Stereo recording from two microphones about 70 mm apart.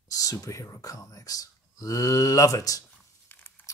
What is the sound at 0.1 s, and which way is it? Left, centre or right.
Speech, left.